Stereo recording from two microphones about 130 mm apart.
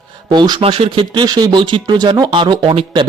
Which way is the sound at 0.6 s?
45° right (ahead or behind).